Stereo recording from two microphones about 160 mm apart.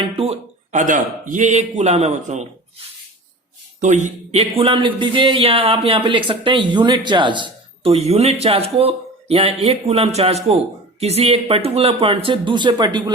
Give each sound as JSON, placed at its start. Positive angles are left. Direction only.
{"t": 0.2, "sound": "a man's voice", "side_deg": -45}
{"t": 3.8, "sound": "a man's voice", "side_deg": -50}